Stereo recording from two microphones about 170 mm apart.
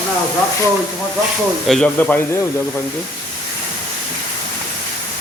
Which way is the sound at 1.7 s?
5° left (ahead or behind).